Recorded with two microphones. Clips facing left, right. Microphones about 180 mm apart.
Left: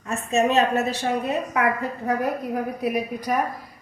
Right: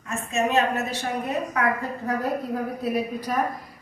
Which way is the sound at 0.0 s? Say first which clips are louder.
Left 4 dB; 35° left (ahead or behind).